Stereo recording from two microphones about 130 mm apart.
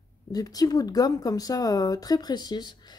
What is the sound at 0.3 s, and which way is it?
A woman's voice, 30° left (ahead or behind).